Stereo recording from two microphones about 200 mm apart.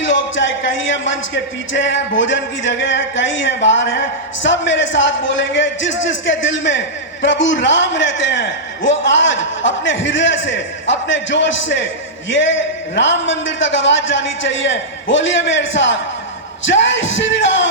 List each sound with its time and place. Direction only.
0.0 s a man's voice: 70° left (ahead or behind)